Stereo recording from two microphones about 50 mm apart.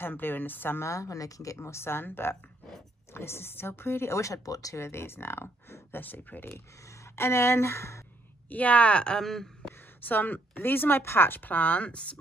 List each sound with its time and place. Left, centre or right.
0.2 s speech: left
0.7 s a woman's voice: left
7.2 s speech: left
8.5 s speech: left
9.2 s speech: centre
10.0 s speech: left